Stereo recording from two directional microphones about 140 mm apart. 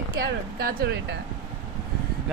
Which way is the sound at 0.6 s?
90° right.